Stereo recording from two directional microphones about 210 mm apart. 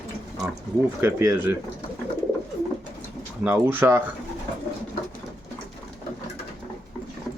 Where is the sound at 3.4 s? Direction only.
10° right (ahead or behind).